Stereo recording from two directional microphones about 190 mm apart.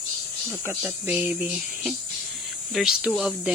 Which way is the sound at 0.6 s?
10° right (ahead or behind).